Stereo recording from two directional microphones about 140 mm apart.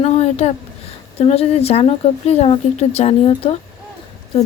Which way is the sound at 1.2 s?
45° left (ahead or behind).